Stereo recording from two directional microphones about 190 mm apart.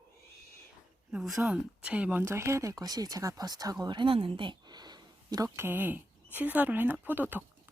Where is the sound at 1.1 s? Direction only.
Centre (ahead or behind).